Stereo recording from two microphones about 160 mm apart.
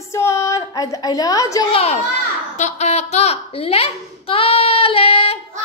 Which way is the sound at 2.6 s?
45° left (ahead or behind).